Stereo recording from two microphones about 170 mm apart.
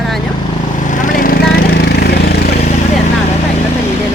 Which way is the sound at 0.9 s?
50° left (ahead or behind).